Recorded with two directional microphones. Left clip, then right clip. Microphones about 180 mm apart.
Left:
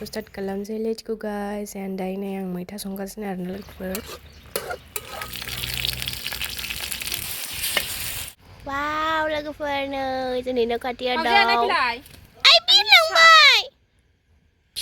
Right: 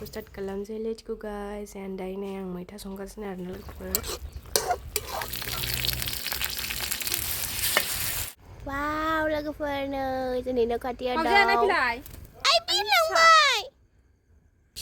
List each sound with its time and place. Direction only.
0.0 s a woman's voice: 20° left (ahead or behind)
4.5 s stir: 15° right (ahead or behind)
5.9 s a sound: 15° right (ahead or behind)
8.6 s a child's voice: 15° left (ahead or behind)
11.5 s speech: 15° right (ahead or behind)
12.4 s a sound: 5° left (ahead or behind)